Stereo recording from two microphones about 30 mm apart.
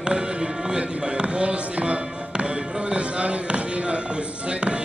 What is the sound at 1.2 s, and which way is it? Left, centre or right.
Music, right.